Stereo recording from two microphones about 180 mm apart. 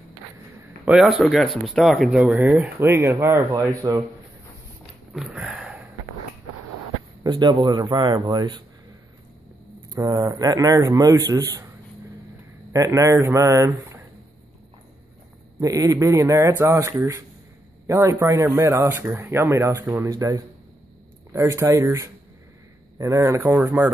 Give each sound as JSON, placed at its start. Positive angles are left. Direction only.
{"t": 0.8, "sound": "speech", "side_deg": -5}
{"t": 5.1, "sound": "sniff", "side_deg": -5}
{"t": 7.2, "sound": "a man's voice", "side_deg": -25}
{"t": 9.9, "sound": "a man's voice", "side_deg": -20}
{"t": 12.7, "sound": "speech", "side_deg": -20}
{"t": 15.6, "sound": "speech", "side_deg": -20}